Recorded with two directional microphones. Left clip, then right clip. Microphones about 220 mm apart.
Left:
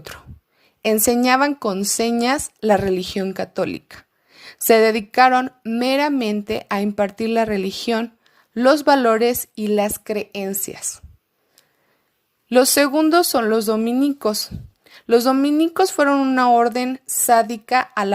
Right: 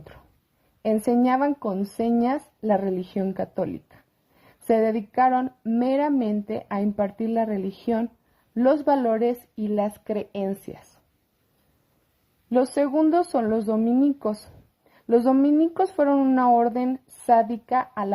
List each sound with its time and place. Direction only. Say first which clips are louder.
0.8 s speech: left 5 dB; 30° left (ahead or behind)
12.5 s speech: left 7 dB; 30° left (ahead or behind)